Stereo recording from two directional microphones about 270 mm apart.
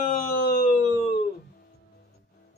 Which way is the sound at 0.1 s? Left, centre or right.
Left.